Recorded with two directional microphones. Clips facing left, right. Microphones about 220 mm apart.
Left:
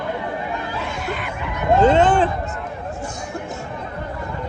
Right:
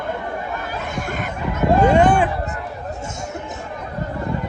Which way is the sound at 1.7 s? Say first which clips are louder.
Left 1 dB; 20° left (ahead or behind).